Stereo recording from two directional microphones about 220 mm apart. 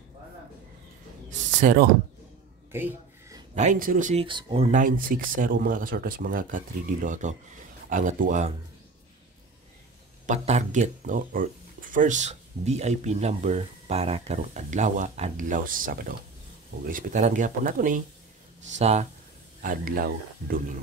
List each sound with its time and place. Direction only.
1.6 s speech: 35° right (ahead or behind)
2.7 s a sound: 10° right (ahead or behind)
3.5 s speech: 35° right (ahead or behind)
4.6 s speech: 35° right (ahead or behind)
10.2 s speech: 30° right (ahead or behind)